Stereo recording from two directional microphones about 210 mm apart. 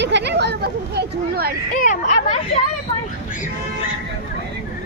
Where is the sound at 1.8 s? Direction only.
35° left (ahead or behind).